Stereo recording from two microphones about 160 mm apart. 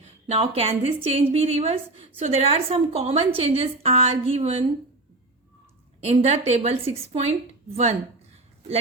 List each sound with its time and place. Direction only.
0.0 s a woman's voice: 40° right (ahead or behind)
6.0 s a woman's voice: 40° right (ahead or behind)